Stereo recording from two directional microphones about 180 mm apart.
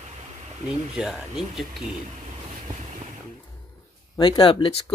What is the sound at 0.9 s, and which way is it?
Speech, 5° right (ahead or behind).